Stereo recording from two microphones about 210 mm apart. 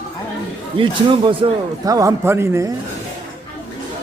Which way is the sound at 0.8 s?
25° right (ahead or behind).